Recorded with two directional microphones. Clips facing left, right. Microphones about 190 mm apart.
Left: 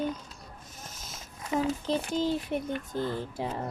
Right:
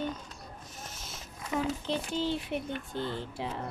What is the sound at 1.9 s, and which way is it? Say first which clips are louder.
Speech: left 3 dB; 40° left (ahead or behind).